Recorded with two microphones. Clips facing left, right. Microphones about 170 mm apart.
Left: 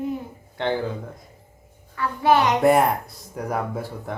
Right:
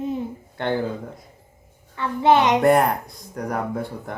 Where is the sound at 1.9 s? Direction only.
20° right (ahead or behind).